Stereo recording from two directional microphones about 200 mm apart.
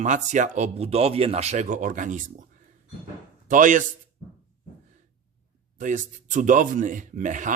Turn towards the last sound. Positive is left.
turn(degrees=-40)  # may be behind; listen again after turning